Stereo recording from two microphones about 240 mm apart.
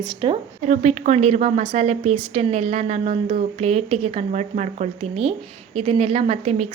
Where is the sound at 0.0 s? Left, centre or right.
Right.